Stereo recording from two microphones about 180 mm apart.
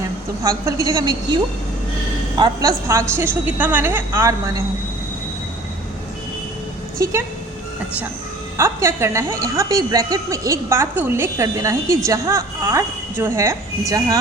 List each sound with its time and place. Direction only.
0.4 s a woman's voice: 15° right (ahead or behind)
2.4 s a woman's voice: 20° right (ahead or behind)
7.0 s a woman's voice: 15° right (ahead or behind)
8.5 s a woman's voice: 15° right (ahead or behind)